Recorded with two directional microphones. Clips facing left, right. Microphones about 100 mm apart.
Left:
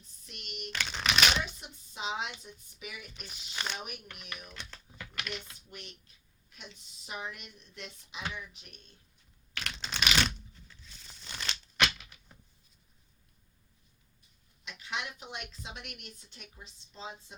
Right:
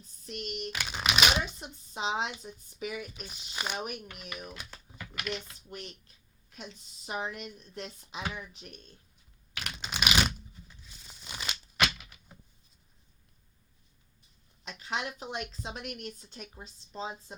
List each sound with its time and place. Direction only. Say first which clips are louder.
0.0 s speech: right 11 dB; 35° right (ahead or behind)
0.7 s speech: left 1 dB; 10° right (ahead or behind)
1.5 s a woman's voice: right 4 dB; 35° right (ahead or behind)
3.1 s speech: right 3 dB; 5° right (ahead or behind)
3.8 s a woman's voice: right 6 dB; 40° right (ahead or behind)
4.5 s typing: right 1 dB; 10° right (ahead or behind)
5.7 s a woman's voice: right 6 dB; 35° right (ahead or behind)
9.6 s a sound: right 1 dB; 10° right (ahead or behind)
11.8 s typewriter: even; 5° right (ahead or behind)
14.6 s a woman's voice: right 4 dB; 40° right (ahead or behind)